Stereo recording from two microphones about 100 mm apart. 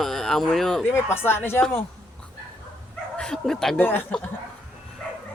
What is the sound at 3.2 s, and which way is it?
Speech, 5° left (ahead or behind).